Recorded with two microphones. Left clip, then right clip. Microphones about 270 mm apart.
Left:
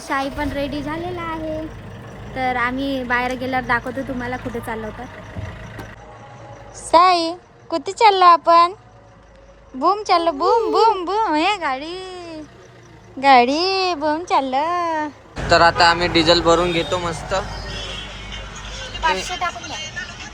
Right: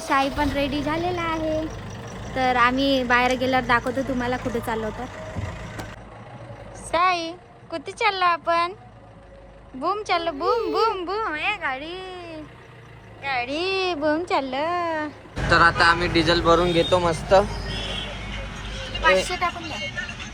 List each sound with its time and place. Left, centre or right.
0.0 s speech: centre
6.9 s a child's voice: centre
9.8 s a child's voice: centre